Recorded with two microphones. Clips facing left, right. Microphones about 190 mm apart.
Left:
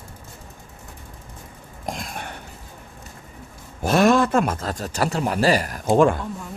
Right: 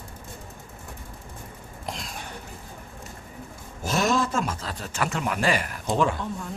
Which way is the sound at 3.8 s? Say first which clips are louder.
Left 7 dB; 60° left (ahead or behind).